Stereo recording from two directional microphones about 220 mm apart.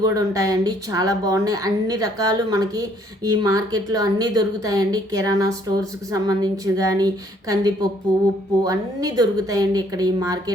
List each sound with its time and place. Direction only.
0.0 s a woman's voice: 15° right (ahead or behind)